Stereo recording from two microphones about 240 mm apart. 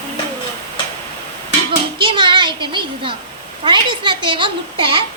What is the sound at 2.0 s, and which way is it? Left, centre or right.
A woman's voice, centre.